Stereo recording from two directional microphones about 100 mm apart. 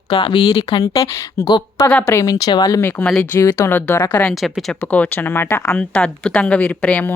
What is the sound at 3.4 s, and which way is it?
Speech, 30° left (ahead or behind).